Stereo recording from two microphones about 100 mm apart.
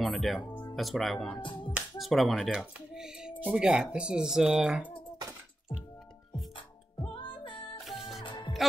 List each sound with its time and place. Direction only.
0.0 s speech: centre (ahead or behind)
1.4 s music: 55° left (ahead or behind)
2.0 s speech: centre (ahead or behind)
6.5 s music: 55° left (ahead or behind)